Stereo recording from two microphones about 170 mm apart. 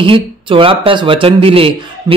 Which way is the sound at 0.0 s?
30° right (ahead or behind).